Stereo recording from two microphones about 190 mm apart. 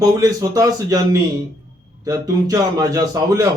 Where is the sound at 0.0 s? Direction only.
20° right (ahead or behind).